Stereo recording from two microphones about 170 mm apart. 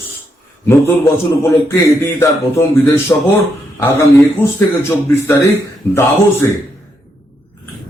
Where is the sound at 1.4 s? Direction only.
15° left (ahead or behind).